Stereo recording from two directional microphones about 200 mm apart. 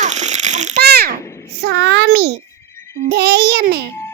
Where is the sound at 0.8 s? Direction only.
55° right (ahead or behind).